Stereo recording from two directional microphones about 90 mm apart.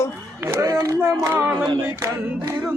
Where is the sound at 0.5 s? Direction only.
40° right (ahead or behind).